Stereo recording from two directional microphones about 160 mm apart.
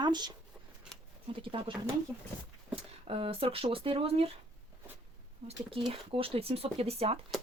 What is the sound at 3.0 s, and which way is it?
Speech, 35° right (ahead or behind).